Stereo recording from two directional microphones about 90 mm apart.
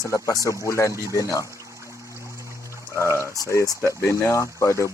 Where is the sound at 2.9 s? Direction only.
30° left (ahead or behind).